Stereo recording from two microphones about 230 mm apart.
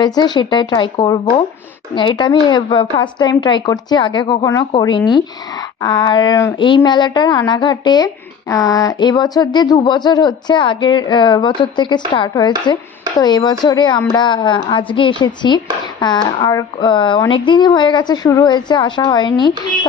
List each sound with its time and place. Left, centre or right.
0.0 s a woman's voice: centre